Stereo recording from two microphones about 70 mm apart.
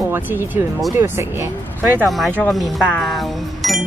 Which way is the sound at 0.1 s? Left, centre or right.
Right.